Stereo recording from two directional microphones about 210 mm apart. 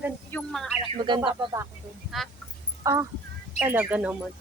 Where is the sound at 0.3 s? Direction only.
5° left (ahead or behind).